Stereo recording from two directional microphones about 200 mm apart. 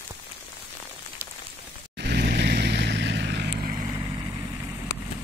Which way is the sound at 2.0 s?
55° right (ahead or behind).